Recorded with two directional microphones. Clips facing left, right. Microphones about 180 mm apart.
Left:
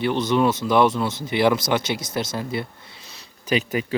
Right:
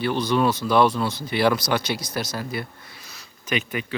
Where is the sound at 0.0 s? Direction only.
20° left (ahead or behind).